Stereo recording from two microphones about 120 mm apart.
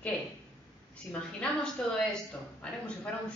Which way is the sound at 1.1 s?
10° left (ahead or behind).